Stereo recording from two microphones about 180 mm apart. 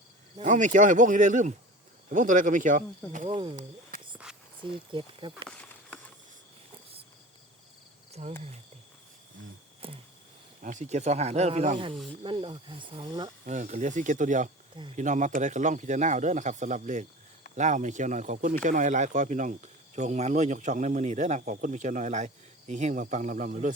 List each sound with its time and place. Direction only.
0.3 s speech: 45° right (ahead or behind)
3.2 s speech: 30° right (ahead or behind)
3.5 s a sound: 45° right (ahead or behind)
4.6 s speech: 25° right (ahead or behind)
8.2 s speech: 35° right (ahead or behind)
9.8 s a sound: 30° right (ahead or behind)
10.6 s speech: 45° right (ahead or behind); by 13.3 s 20° right (ahead or behind)
13.4 s speech: 40° right (ahead or behind)